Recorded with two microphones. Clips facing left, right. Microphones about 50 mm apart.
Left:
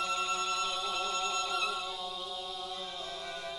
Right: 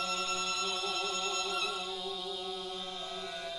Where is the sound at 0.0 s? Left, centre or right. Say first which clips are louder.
Left 2 dB; centre.